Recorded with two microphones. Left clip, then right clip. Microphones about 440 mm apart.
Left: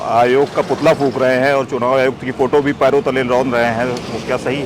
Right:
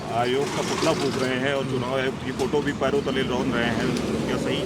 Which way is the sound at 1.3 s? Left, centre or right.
Left.